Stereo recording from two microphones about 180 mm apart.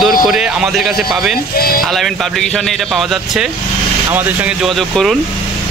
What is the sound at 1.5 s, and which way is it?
Speech, 55° left (ahead or behind).